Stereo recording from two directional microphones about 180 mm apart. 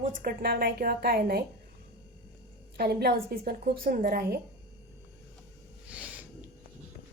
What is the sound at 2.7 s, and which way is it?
A woman's voice, 60° right (ahead or behind).